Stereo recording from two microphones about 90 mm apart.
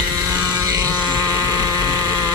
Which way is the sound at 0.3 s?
40° right (ahead or behind).